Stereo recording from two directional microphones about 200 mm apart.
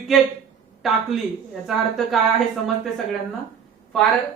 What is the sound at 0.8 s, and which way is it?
A man's voice, centre (ahead or behind).